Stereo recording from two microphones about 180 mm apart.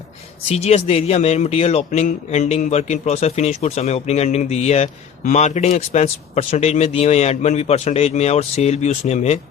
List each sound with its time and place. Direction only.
0.4 s speech: 35° left (ahead or behind)